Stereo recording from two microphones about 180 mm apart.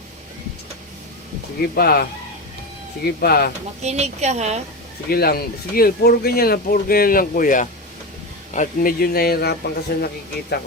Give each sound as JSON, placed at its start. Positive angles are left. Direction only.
{"t": 1.7, "sound": "speech", "side_deg": 60}
{"t": 3.2, "sound": "speech", "side_deg": 60}
{"t": 3.8, "sound": "a woman's voice", "side_deg": -40}
{"t": 5.0, "sound": "speech", "side_deg": 60}